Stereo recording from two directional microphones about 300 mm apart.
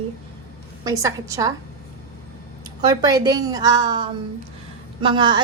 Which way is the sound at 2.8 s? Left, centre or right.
Centre.